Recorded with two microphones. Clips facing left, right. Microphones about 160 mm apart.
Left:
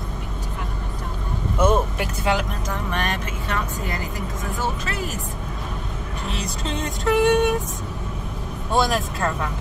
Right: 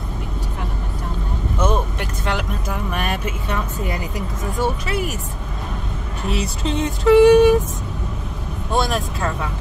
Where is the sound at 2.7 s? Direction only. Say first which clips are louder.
Right 2 dB; 10° right (ahead or behind).